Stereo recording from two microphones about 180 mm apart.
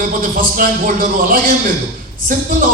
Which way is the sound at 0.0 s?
50° right (ahead or behind).